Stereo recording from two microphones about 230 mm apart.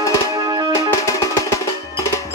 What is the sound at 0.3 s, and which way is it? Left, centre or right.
Music, centre.